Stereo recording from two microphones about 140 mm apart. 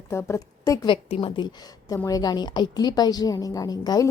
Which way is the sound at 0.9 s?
35° left (ahead or behind).